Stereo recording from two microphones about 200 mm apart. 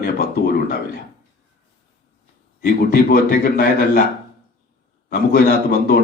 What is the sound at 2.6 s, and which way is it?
A man's voice, 50° left (ahead or behind).